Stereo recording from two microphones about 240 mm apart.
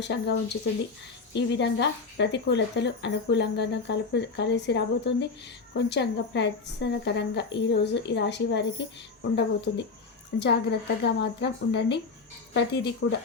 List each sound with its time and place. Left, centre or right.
0.0 s speech: left